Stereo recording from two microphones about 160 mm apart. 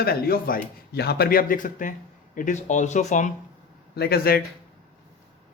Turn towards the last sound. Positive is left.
turn(degrees=80)